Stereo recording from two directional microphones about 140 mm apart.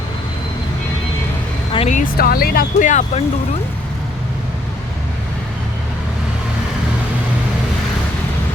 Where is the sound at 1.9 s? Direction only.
80° left.